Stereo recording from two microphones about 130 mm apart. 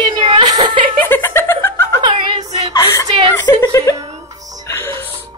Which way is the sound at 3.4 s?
30° left (ahead or behind).